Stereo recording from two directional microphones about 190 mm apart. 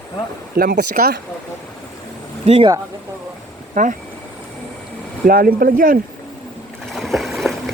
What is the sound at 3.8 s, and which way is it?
Speech, 40° right (ahead or behind).